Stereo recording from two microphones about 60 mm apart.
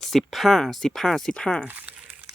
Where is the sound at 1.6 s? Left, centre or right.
Right.